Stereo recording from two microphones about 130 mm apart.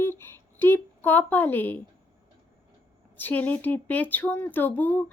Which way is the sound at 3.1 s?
15° left (ahead or behind).